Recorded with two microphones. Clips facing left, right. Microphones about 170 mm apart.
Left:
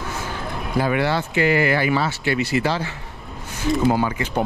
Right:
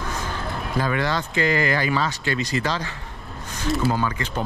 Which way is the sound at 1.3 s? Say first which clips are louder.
Left 3 dB; 15° left (ahead or behind).